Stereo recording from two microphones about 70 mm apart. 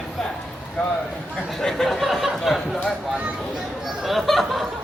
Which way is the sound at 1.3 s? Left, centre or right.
Centre.